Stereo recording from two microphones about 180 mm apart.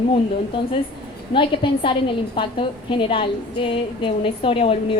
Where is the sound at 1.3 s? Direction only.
30° left (ahead or behind).